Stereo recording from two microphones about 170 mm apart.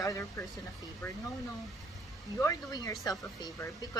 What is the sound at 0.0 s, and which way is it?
Speech, 20° left (ahead or behind).